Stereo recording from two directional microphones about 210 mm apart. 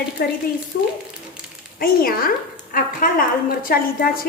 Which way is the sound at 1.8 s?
45° left (ahead or behind).